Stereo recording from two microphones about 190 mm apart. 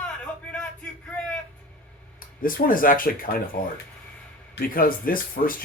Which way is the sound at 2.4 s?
50° left (ahead or behind).